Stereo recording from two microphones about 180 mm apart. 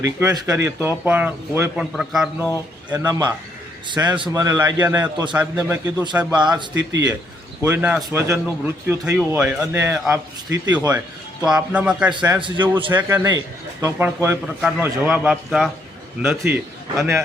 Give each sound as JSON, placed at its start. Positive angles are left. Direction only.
{"t": 0.0, "sound": "a man's voice", "side_deg": -15}
{"t": 2.9, "sound": "a man's voice", "side_deg": -20}
{"t": 6.1, "sound": "a man's voice", "side_deg": -5}
{"t": 7.6, "sound": "speech", "side_deg": -10}
{"t": 11.4, "sound": "speech", "side_deg": -5}
{"t": 12.3, "sound": "a man's voice", "side_deg": -25}
{"t": 12.9, "sound": "speech", "side_deg": -15}
{"t": 14.4, "sound": "a man's voice", "side_deg": -5}